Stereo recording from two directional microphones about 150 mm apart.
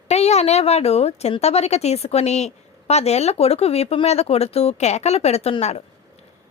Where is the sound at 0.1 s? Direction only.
45° left (ahead or behind).